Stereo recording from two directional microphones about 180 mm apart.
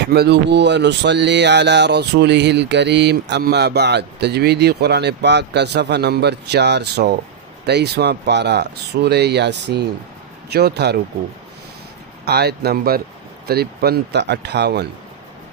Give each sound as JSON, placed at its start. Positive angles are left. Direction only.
{"t": 0.0, "sound": "speech", "side_deg": -65}
{"t": 12.2, "sound": "speech", "side_deg": -65}